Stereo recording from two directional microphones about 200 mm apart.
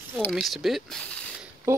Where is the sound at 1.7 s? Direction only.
15° right (ahead or behind).